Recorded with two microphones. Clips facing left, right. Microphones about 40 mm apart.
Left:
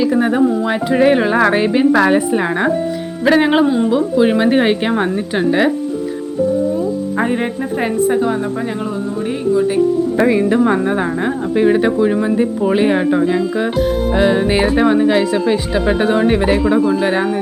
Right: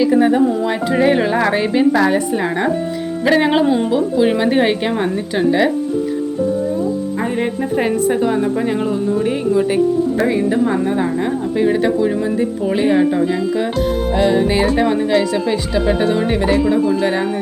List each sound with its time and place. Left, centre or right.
0.9 s a woman's voice: centre
1.9 s a woman's voice: left
3.2 s a woman's voice: centre
10.2 s speech: left
11.5 s a woman's voice: left